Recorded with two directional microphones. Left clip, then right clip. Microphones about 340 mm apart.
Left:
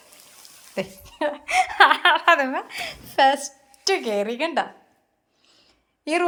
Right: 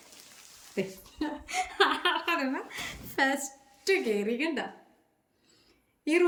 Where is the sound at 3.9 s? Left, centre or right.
Left.